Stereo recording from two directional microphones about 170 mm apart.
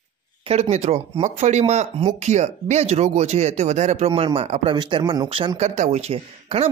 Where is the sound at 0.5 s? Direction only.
40° right (ahead or behind).